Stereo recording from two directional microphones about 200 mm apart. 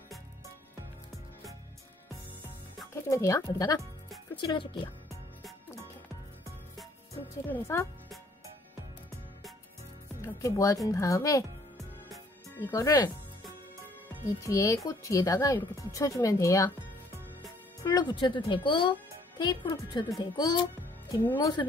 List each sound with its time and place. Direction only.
3.1 s speech: 15° left (ahead or behind)
7.4 s speech: 10° left (ahead or behind)
10.2 s speech: 15° left (ahead or behind)
12.7 s speech: 20° left (ahead or behind)
14.4 s speech: 15° left (ahead or behind)
17.8 s speech: 20° left (ahead or behind)